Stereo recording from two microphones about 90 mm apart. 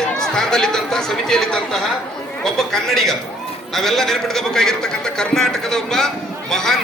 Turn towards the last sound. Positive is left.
turn(degrees=5)  # may be behind; listen again after turning